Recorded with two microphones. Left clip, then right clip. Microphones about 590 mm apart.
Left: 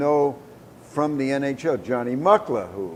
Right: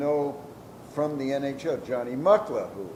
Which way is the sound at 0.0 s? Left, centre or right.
Left.